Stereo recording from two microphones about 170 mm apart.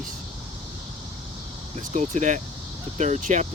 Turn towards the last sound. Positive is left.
turn(degrees=-45)  # may be behind; listen again after turning